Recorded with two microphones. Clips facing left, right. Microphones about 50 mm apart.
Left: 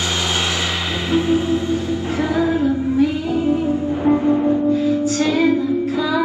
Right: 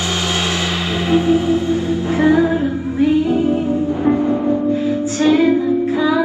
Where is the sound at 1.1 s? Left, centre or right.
Right.